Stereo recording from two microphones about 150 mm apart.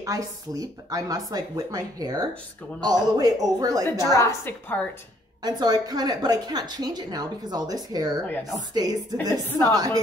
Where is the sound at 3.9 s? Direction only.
20° left (ahead or behind).